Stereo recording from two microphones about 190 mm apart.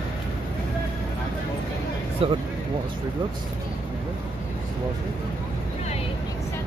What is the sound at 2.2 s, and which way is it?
Speech, 30° right (ahead or behind).